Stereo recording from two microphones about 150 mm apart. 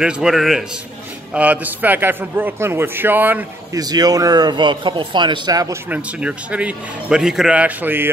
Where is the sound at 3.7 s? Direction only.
25° right (ahead or behind).